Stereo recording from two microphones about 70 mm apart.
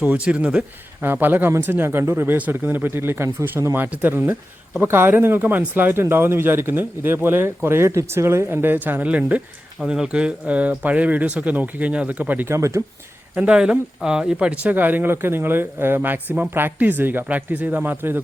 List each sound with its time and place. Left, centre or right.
0.2 s speech: centre
1.0 s speech: right
12.5 s speech: right
13.3 s speech: centre